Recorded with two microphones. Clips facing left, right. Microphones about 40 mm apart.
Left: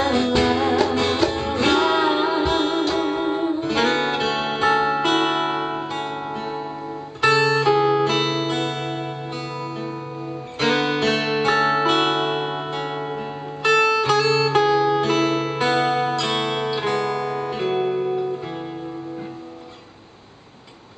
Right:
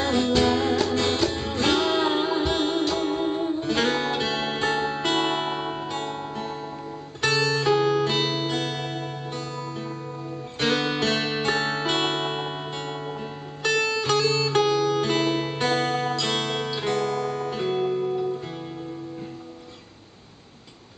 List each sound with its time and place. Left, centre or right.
0.0 s music: centre
10.6 s music: centre